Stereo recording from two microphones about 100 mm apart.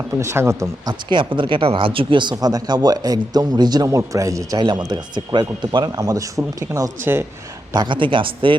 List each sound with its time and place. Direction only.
0.2 s speech: 25° right (ahead or behind)
0.9 s speech: 55° right (ahead or behind)
2.3 s speech: 40° right (ahead or behind)
4.8 s speech: 45° right (ahead or behind)
6.0 s speech: 35° right (ahead or behind)
7.0 s speech: 25° right (ahead or behind)
7.7 s speech: 50° right (ahead or behind)